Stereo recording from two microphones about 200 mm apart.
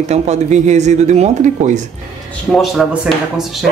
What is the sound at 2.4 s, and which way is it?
Speech, centre (ahead or behind).